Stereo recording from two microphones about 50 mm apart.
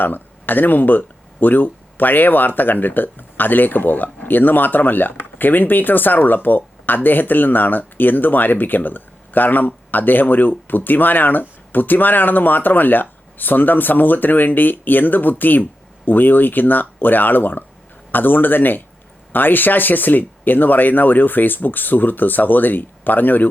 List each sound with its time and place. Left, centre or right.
0.0 s speech: left